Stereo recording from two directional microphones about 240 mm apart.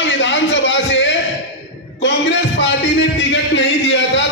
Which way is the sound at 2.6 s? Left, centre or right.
Left.